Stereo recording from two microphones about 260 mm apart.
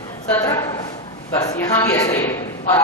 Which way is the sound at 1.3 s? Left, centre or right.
Centre.